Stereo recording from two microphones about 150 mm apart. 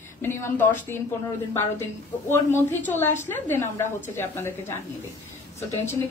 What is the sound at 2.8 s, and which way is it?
A woman's voice, 15° left (ahead or behind).